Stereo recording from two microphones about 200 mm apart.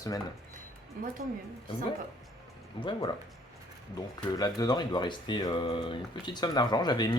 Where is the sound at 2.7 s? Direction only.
25° left (ahead or behind).